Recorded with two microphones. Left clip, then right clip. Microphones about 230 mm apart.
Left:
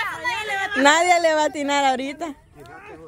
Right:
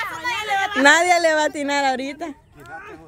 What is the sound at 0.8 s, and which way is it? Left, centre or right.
A woman's voice, centre.